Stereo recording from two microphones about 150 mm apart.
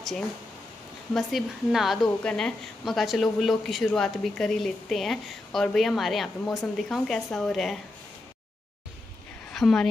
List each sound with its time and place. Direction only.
1.1 s speech: centre (ahead or behind)
9.5 s a woman's voice: 5° left (ahead or behind)